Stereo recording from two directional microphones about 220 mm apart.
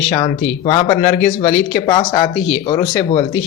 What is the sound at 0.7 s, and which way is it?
Speech, 20° left (ahead or behind).